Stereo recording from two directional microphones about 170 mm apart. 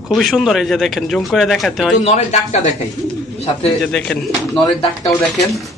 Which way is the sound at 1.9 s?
40° left (ahead or behind).